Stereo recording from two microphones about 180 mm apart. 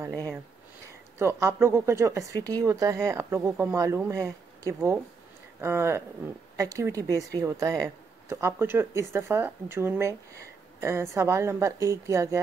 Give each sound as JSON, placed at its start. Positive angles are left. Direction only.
{"t": 1.1, "sound": "speech", "side_deg": -15}